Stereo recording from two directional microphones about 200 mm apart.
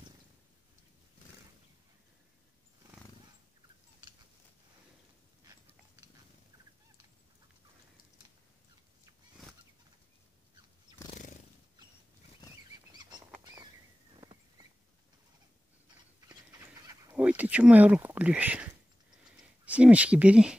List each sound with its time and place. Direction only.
11.1 s neigh: 40° left (ahead or behind)
16.5 s bird: 15° right (ahead or behind)
17.2 s speech: 5° right (ahead or behind)
19.2 s a sound: 5° right (ahead or behind)